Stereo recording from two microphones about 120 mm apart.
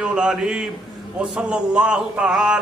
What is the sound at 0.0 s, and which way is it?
Mantra, 5° right (ahead or behind).